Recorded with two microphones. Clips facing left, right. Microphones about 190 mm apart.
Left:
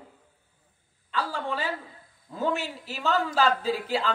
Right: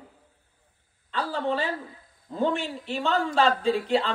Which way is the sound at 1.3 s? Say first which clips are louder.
Right 4 dB; 35° right (ahead or behind).